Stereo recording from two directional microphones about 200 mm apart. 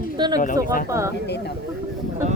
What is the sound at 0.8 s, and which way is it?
Speech, 15° right (ahead or behind).